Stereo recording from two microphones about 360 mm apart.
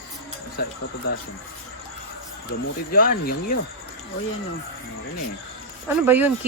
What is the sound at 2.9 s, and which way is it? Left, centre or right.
Speech, left.